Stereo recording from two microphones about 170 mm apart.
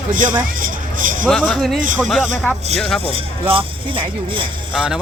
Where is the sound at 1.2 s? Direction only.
Centre (ahead or behind).